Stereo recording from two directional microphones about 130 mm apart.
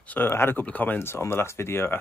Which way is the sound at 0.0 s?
15° left (ahead or behind).